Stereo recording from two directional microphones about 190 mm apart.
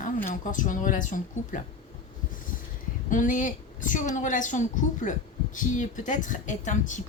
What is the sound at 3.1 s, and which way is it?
A woman's voice, 45° left (ahead or behind).